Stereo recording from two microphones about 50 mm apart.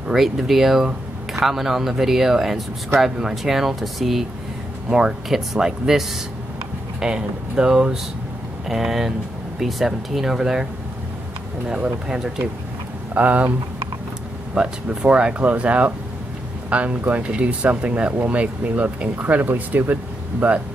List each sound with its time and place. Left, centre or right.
0.1 s speech: centre
4.8 s speech: centre
13.1 s speech: right
14.5 s speech: centre; by 20.5 s right